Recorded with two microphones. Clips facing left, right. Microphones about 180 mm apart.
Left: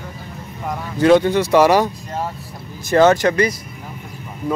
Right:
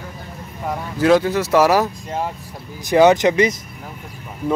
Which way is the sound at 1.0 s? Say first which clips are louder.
Left 2 dB; 5° right (ahead or behind).